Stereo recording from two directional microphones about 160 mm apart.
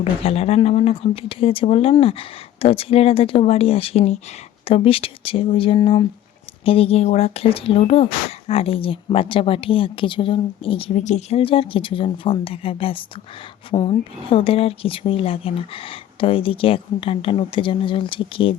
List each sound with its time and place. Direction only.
0.0 s speech: 35° left (ahead or behind)